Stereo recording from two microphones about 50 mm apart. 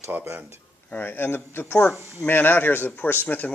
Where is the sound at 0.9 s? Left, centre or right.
Left.